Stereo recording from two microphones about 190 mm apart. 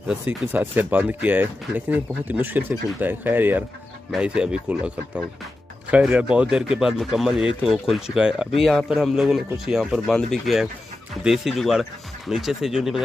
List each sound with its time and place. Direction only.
0.1 s speech: 5° right (ahead or behind)